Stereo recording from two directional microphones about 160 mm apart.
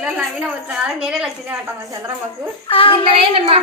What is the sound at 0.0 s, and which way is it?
A woman's voice, 5° right (ahead or behind).